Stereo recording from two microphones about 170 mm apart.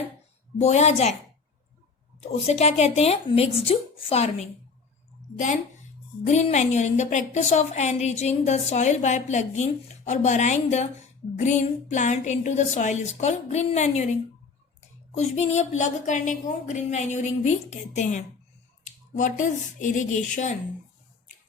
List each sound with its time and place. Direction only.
0.6 s a woman's voice: 40° left (ahead or behind)
2.4 s a woman's voice: 40° left (ahead or behind)
6.2 s a woman's voice: 45° left (ahead or behind)